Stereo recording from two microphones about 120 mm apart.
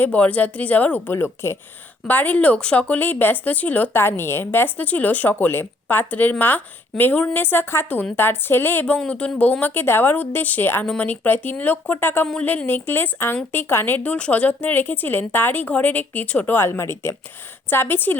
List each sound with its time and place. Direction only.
0.0 s a woman's voice: 10° left (ahead or behind)